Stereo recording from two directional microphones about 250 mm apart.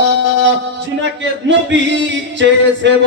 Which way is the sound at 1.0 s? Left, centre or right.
Right.